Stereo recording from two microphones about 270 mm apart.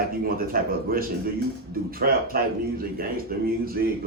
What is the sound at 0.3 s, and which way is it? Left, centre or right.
A man's voice, right.